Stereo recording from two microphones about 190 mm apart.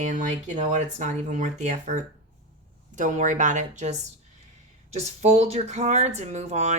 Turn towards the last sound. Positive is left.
turn(degrees=-35)  # may be behind; listen again after turning